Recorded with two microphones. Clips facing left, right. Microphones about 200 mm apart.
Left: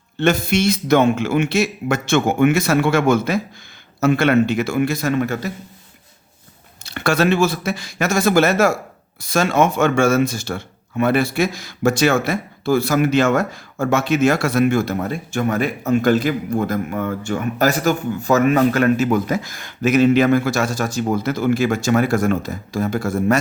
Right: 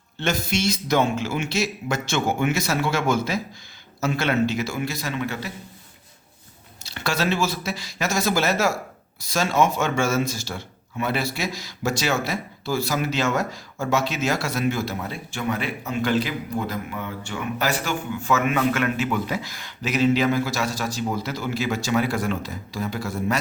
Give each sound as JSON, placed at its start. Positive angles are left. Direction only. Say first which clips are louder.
{"t": 0.2, "sound": "a man's voice", "louder": "left 7 dB", "side_deg": 60}
{"t": 6.8, "sound": "a man's voice", "louder": "left 7 dB", "side_deg": 55}